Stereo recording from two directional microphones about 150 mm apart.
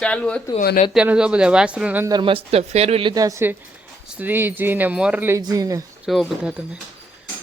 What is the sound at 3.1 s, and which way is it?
Speech, 25° right (ahead or behind).